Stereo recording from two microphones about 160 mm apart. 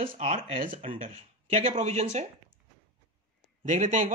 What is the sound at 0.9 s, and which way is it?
Speech, 55° right (ahead or behind).